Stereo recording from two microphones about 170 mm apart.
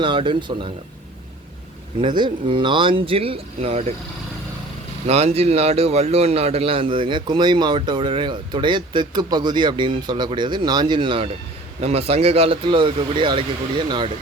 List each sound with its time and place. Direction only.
0.0 s a man's voice: 30° right (ahead or behind)
2.0 s speech: 30° right (ahead or behind)
5.0 s a man's voice: 35° right (ahead or behind)